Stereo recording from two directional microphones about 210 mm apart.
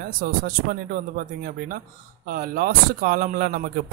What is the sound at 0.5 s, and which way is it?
Speech, 45° right (ahead or behind).